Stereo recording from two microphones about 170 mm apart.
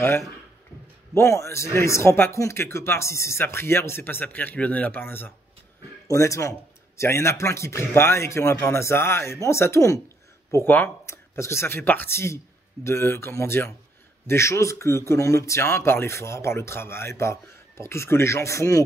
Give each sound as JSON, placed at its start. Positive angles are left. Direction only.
{"t": 1.1, "sound": "speech", "side_deg": 15}